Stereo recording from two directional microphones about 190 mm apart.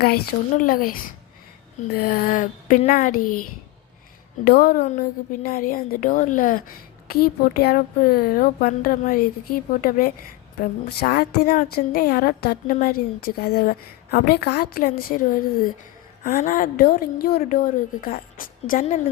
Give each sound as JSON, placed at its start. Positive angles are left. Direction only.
{"t": 0.0, "sound": "a woman's voice", "side_deg": 50}
{"t": 4.4, "sound": "a woman's voice", "side_deg": 55}
{"t": 10.6, "sound": "a woman's voice", "side_deg": 55}